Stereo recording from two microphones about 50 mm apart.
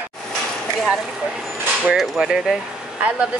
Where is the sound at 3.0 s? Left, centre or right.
Right.